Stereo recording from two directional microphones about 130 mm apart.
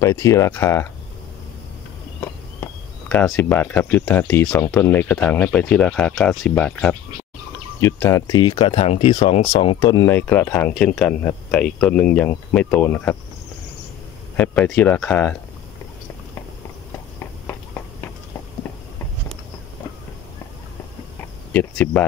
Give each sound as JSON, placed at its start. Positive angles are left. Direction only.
{"t": 0.0, "sound": "speech", "side_deg": 25}
{"t": 2.1, "sound": "a sound", "side_deg": 15}
{"t": 3.3, "sound": "speech", "side_deg": 10}
{"t": 7.8, "sound": "speech", "side_deg": 20}
{"t": 9.8, "sound": "speech", "side_deg": 25}
{"t": 14.3, "sound": "speech", "side_deg": 10}
{"t": 17.2, "sound": "a sound", "side_deg": 20}
{"t": 21.5, "sound": "speech", "side_deg": 10}